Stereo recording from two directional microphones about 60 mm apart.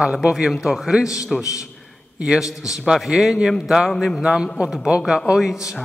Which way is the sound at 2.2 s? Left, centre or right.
Centre.